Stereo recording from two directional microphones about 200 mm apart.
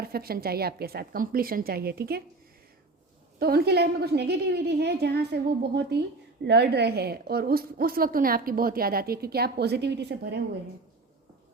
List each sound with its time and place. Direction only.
0.0 s a woman's voice: 50° right (ahead or behind)
3.3 s a woman's voice: 50° right (ahead or behind)